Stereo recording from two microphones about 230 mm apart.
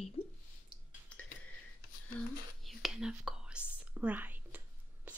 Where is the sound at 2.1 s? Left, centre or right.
Centre.